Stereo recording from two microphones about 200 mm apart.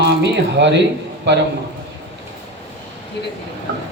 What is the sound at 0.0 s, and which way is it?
A man's voice, 60° right (ahead or behind).